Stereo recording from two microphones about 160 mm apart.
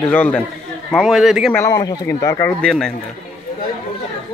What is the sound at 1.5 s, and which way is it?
Speech, 20° left (ahead or behind).